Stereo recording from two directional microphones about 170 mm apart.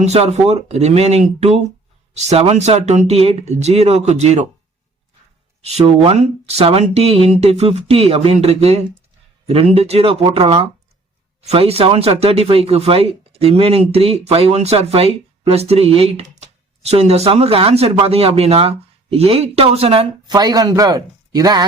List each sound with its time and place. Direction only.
0.0 s speech: 40° right (ahead or behind)
5.6 s speech: 40° right (ahead or behind)